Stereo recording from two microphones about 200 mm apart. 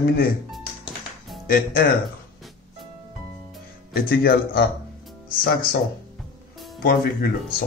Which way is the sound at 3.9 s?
50° left (ahead or behind).